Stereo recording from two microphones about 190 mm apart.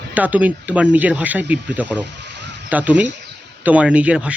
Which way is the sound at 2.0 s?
65° right (ahead or behind).